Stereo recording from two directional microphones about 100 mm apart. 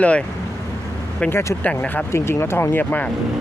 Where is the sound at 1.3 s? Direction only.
25° left (ahead or behind).